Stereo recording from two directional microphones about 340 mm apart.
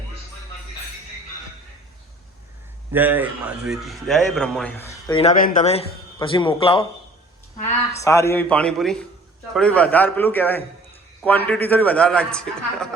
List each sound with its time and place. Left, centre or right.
2.9 s a man's voice: centre
7.9 s a man's voice: centre